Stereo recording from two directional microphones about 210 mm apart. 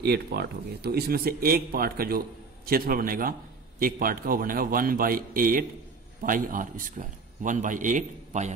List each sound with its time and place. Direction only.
0.0 s a man's voice: 50° right (ahead or behind); by 8.5 s 35° right (ahead or behind)